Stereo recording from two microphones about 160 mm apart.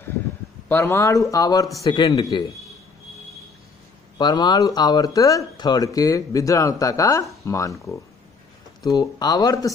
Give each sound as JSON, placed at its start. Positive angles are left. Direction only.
{"t": 0.7, "sound": "speech", "side_deg": 15}
{"t": 4.2, "sound": "speech", "side_deg": 25}